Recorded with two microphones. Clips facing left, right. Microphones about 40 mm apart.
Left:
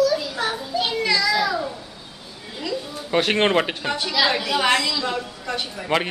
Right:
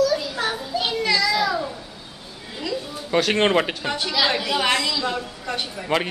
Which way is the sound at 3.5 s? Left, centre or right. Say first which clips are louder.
Even; centre.